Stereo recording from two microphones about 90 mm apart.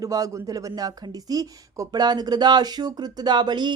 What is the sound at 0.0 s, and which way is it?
A woman's voice, 40° right (ahead or behind).